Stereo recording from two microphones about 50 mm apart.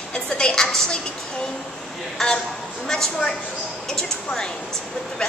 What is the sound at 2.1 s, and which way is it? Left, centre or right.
A woman's voice, centre.